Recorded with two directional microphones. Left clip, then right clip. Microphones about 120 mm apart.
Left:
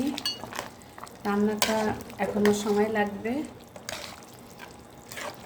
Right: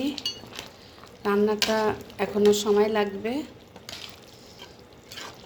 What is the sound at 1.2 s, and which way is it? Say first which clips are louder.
A woman's voice: right 4 dB; 30° right (ahead or behind).